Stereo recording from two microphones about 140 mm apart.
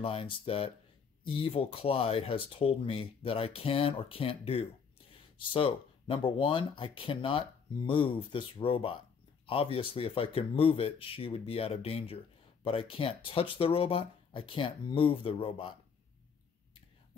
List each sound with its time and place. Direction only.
0.0 s speech: 40° left (ahead or behind)